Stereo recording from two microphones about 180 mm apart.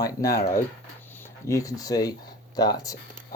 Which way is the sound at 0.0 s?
20° left (ahead or behind).